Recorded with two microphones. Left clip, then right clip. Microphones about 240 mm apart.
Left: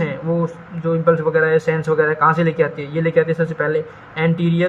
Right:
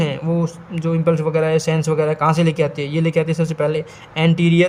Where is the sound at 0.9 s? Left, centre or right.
Right.